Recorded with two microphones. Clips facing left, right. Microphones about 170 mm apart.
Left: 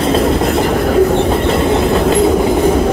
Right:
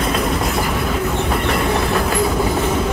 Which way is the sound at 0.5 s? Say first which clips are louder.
Left 7 dB; 55° left (ahead or behind).